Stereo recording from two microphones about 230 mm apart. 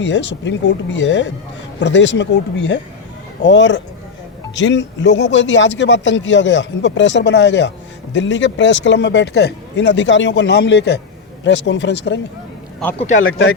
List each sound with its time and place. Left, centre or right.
0.0 s speech: left